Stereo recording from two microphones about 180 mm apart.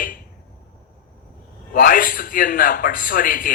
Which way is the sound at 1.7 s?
50° left (ahead or behind).